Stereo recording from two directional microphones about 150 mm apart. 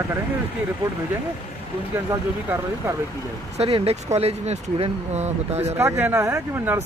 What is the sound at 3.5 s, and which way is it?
Speech, 40° right (ahead or behind).